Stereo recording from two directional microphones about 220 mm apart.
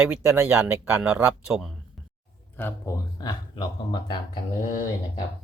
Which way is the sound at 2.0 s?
Centre (ahead or behind).